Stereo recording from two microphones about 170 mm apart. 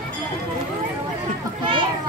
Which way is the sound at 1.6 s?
30° right (ahead or behind).